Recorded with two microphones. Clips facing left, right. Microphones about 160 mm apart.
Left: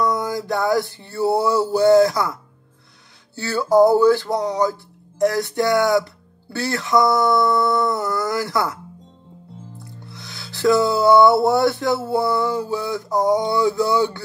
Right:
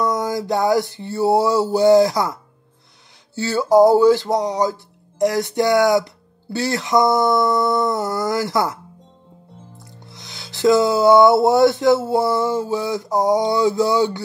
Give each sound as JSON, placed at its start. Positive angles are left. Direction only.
{"t": 0.1, "sound": "speech", "side_deg": -20}
{"t": 3.3, "sound": "music", "side_deg": -20}
{"t": 5.2, "sound": "speech", "side_deg": -20}
{"t": 10.0, "sound": "speech", "side_deg": -20}